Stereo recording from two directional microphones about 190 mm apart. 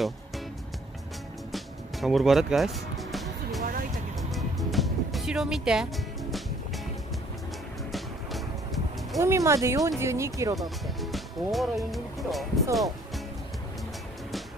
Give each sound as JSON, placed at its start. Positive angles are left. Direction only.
{"t": 1.5, "sound": "music", "side_deg": 0}
{"t": 7.9, "sound": "music", "side_deg": 0}
{"t": 9.2, "sound": "speech", "side_deg": -15}
{"t": 10.5, "sound": "speech", "side_deg": 0}
{"t": 12.7, "sound": "music", "side_deg": 0}